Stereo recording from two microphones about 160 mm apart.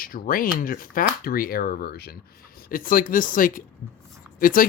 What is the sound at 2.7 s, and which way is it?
Speech, 60° left (ahead or behind).